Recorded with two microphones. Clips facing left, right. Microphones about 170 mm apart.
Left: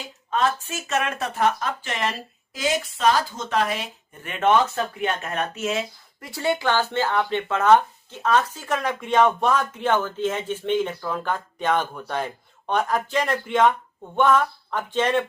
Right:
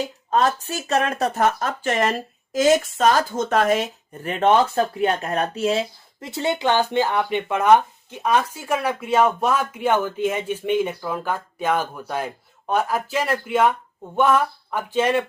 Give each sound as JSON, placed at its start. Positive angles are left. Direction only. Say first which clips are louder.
{"t": 0.0, "sound": "speech", "louder": "right 4 dB", "side_deg": -40}
{"t": 6.2, "sound": "speech", "louder": "right 2 dB", "side_deg": -20}